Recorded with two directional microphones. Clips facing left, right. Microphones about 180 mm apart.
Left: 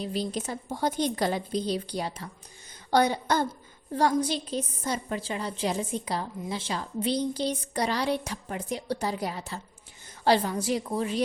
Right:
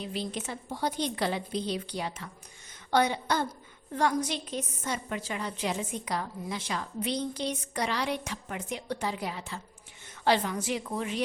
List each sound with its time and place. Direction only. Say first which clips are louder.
0.0 s a woman's voice: left 4 dB; 40° left (ahead or behind)